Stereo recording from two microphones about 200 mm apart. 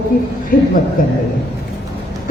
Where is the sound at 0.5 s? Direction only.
45° left (ahead or behind).